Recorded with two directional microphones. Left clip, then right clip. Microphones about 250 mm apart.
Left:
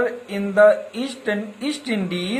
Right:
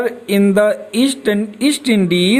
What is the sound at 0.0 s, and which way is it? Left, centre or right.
A woman's voice, right.